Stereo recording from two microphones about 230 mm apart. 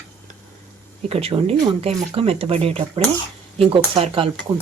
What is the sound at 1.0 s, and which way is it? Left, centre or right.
Speech, right.